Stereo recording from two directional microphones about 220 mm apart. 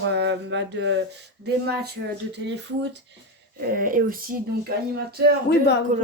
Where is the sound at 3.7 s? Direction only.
40° right (ahead or behind).